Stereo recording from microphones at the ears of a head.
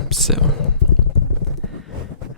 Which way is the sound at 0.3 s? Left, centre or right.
Left.